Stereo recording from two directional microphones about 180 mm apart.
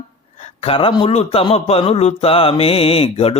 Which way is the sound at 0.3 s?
35° left (ahead or behind).